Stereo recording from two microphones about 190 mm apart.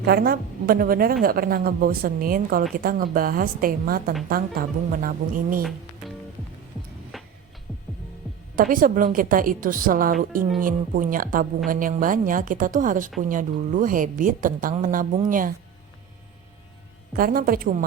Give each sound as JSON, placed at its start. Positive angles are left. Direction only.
{"t": 0.0, "sound": "a woman's voice", "side_deg": -55}
{"t": 7.1, "sound": "music", "side_deg": 0}
{"t": 8.5, "sound": "a woman's voice", "side_deg": -45}
{"t": 17.2, "sound": "a woman's voice", "side_deg": -50}